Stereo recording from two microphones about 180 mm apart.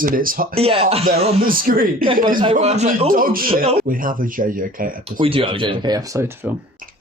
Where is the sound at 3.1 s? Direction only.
50° right (ahead or behind).